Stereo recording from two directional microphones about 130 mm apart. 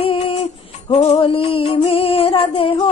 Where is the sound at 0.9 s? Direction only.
50° left (ahead or behind).